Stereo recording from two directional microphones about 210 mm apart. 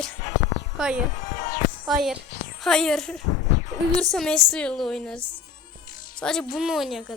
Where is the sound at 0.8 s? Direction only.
5° right (ahead or behind).